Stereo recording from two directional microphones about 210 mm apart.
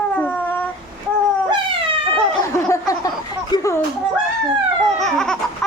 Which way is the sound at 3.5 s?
15° left (ahead or behind).